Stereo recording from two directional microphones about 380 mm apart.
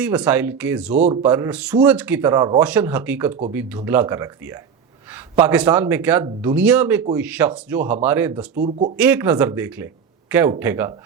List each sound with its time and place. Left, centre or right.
0.0 s speech: centre
8.5 s speech: centre
9.0 s speech: centre